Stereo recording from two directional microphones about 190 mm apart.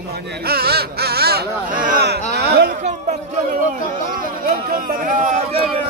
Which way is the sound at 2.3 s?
60° right (ahead or behind).